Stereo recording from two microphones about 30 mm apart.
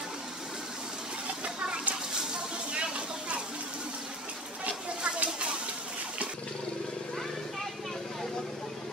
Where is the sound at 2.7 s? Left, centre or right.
Right.